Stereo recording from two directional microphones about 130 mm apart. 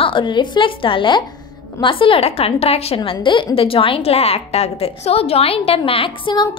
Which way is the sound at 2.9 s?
40° left (ahead or behind).